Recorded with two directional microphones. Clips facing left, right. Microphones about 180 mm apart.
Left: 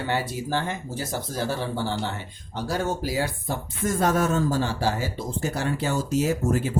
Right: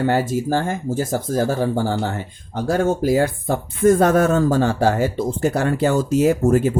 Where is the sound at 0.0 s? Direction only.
45° right (ahead or behind).